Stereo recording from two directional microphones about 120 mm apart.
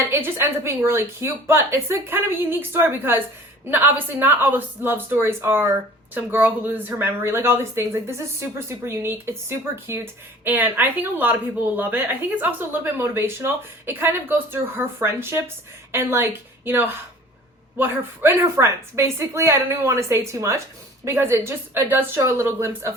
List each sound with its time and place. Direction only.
0.0 s a woman's voice: 20° right (ahead or behind)